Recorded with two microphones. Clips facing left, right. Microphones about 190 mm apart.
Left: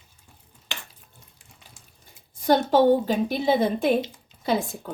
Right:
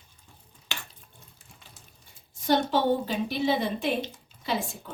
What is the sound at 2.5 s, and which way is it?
A woman's voice, 45° left (ahead or behind).